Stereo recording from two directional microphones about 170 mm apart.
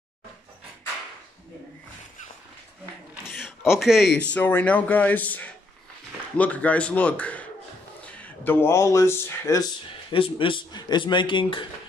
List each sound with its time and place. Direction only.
3.3 s speech: centre (ahead or behind); by 9.7 s 15° left (ahead or behind)
10.1 s a man's voice: 30° left (ahead or behind)